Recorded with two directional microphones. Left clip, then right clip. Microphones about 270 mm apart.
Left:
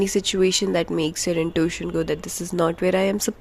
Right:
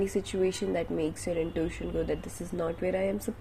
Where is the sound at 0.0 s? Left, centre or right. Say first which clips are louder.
Left 8 dB; left.